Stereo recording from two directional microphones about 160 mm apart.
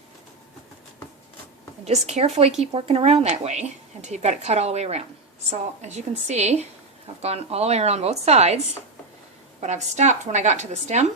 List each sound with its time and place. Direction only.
1.8 s a woman's voice: 45° right (ahead or behind)